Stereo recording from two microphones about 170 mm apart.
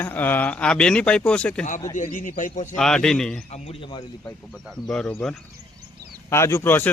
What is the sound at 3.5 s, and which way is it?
Speech, 35° left (ahead or behind).